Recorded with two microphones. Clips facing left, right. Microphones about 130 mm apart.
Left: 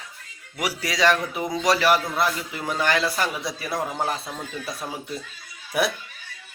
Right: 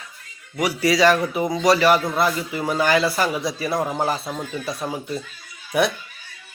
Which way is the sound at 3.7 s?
25° right (ahead or behind).